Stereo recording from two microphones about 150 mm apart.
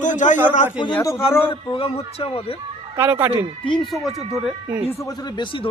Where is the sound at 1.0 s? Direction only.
20° left (ahead or behind).